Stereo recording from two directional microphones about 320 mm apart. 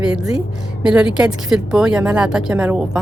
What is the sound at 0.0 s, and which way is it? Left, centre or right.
A woman's voice, centre.